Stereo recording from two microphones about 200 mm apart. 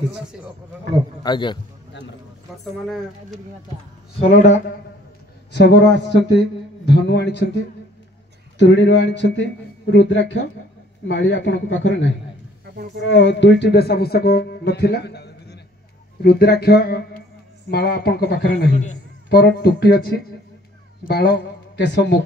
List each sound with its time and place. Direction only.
1.2 s a man's voice: 20° left (ahead or behind)
4.2 s speech: 35° left (ahead or behind)
5.5 s speech: 60° left (ahead or behind)